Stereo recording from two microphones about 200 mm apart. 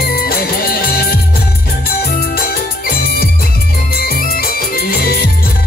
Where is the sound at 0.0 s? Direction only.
50° left (ahead or behind).